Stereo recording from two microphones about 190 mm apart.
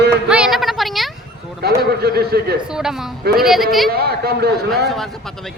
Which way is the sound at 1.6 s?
55° right (ahead or behind).